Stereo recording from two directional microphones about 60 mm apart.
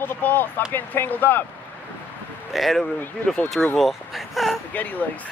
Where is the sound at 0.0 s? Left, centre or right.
Left.